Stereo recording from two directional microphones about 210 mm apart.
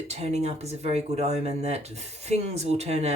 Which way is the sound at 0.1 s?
30° right (ahead or behind).